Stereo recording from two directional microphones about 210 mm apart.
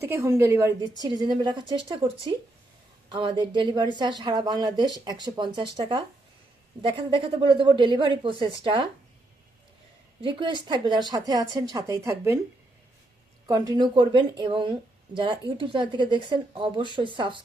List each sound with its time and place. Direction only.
0.0 s a woman's voice: 15° right (ahead or behind)
10.2 s a woman's voice: 25° right (ahead or behind)
13.5 s speech: 20° right (ahead or behind)